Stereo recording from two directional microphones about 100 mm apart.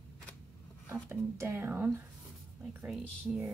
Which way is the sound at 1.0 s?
25° right (ahead or behind).